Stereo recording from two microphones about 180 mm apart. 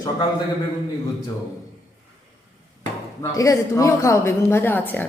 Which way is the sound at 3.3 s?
20° left (ahead or behind).